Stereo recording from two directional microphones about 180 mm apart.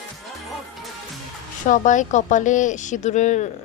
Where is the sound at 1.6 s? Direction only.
45° left (ahead or behind).